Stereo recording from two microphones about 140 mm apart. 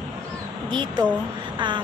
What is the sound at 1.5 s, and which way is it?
Vehicle, 35° right (ahead or behind).